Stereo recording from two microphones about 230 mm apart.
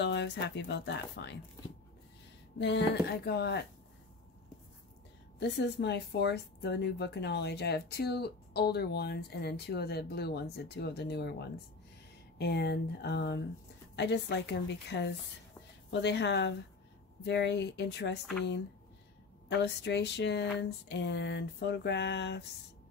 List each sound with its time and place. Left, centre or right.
0.0 s speech: left
2.6 s speech: left
5.4 s speech: left
19.6 s speech: left